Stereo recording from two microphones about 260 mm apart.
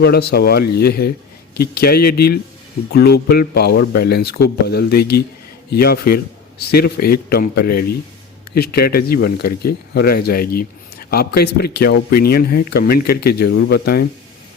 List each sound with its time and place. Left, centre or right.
0.0 s speech: left